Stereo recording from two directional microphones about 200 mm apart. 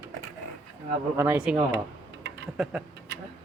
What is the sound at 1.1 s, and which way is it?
Speech, 10° right (ahead or behind).